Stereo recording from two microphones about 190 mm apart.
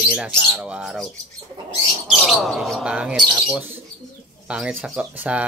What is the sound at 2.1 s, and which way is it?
Speech, centre (ahead or behind).